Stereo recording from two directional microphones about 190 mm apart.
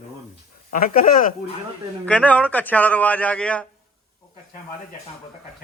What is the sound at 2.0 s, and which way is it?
A man's voice, 5° left (ahead or behind).